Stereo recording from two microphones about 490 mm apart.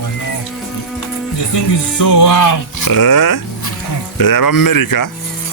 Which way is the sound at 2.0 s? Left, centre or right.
Left.